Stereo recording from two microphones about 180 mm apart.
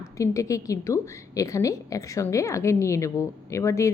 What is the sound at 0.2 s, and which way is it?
Speech, 20° left (ahead or behind).